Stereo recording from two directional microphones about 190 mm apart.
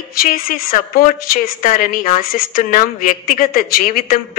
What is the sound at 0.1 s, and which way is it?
A woman's voice, 50° left (ahead or behind).